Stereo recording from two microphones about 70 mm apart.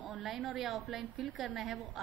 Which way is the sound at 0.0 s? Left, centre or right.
Centre.